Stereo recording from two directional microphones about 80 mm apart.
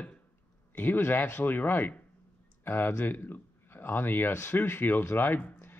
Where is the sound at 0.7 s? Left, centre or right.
Left.